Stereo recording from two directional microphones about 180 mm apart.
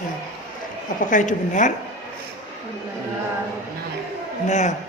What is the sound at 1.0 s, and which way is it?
Speech, 45° left (ahead or behind).